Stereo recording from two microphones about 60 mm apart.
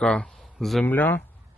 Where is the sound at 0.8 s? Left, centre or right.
Left.